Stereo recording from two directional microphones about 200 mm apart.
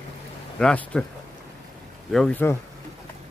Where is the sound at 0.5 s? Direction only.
5° left (ahead or behind).